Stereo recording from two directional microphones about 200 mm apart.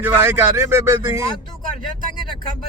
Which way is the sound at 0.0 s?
10° right (ahead or behind).